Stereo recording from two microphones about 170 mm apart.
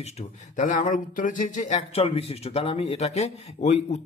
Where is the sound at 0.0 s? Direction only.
40° left (ahead or behind).